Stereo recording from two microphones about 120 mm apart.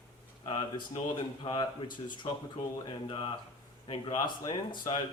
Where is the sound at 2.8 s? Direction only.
45° left (ahead or behind).